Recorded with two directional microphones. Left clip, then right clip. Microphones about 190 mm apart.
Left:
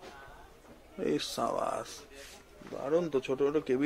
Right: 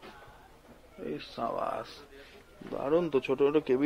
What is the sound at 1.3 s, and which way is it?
Speech, 15° left (ahead or behind).